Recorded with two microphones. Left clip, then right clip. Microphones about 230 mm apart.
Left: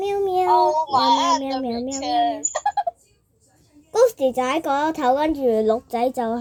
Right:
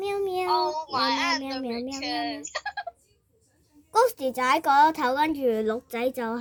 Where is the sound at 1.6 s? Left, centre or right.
Centre.